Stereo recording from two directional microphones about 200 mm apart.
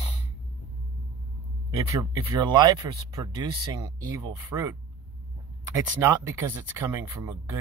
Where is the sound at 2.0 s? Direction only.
20° right (ahead or behind).